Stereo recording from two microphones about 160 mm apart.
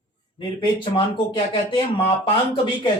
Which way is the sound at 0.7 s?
30° left (ahead or behind).